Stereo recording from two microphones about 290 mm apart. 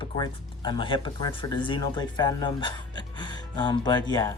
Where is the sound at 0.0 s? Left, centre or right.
Centre.